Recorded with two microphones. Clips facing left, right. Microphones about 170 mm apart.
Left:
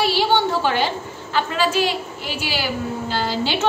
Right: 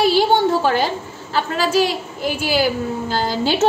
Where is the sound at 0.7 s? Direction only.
40° right (ahead or behind).